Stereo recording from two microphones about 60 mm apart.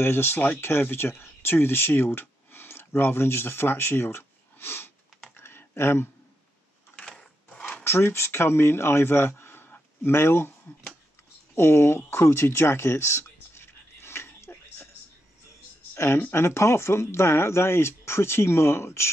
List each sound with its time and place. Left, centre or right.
0.0 s speech: left
5.3 s computer keyboard: left
7.0 s sewing machine: centre
7.8 s speech: left
11.5 s speech: left
12.1 s a sound: left
15.9 s a sound: left
16.2 s speech: left
16.4 s speech: left